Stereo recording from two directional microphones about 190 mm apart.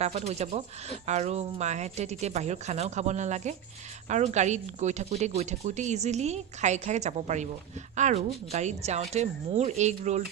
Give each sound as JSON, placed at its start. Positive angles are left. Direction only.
{"t": 0.0, "sound": "speech", "side_deg": -35}